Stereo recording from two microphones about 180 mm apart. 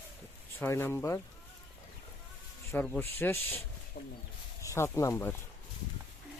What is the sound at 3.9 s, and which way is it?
Speech, 50° left (ahead or behind).